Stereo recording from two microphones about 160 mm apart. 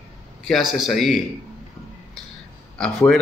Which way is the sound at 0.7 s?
Centre (ahead or behind).